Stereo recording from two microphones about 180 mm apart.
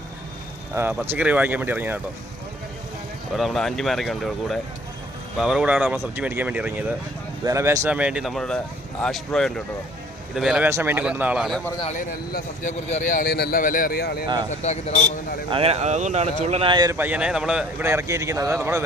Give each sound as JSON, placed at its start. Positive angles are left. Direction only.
{"t": 0.7, "sound": "speech", "side_deg": -10}
{"t": 3.3, "sound": "speech", "side_deg": 0}
{"t": 7.9, "sound": "speech", "side_deg": -5}
{"t": 10.7, "sound": "speech", "side_deg": -15}
{"t": 11.9, "sound": "a man's voice", "side_deg": 45}
{"t": 14.6, "sound": "speech", "side_deg": 40}
{"t": 15.4, "sound": "speech", "side_deg": -30}
{"t": 17.0, "sound": "speech", "side_deg": -5}